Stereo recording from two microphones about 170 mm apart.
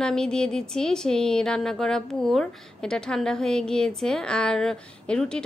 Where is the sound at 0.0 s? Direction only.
5° left (ahead or behind).